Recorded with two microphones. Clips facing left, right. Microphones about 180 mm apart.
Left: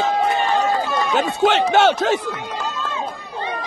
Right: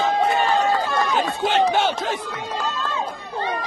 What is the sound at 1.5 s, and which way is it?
Speech, 75° left (ahead or behind).